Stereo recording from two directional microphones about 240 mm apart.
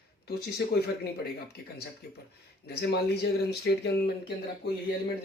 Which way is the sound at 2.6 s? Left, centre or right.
Left.